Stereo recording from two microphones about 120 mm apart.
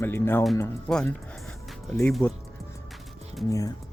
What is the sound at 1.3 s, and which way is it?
Music, centre (ahead or behind).